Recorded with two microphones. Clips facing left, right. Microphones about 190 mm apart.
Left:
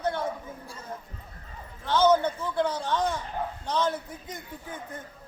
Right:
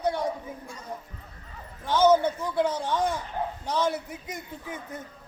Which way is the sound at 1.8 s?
10° right (ahead or behind).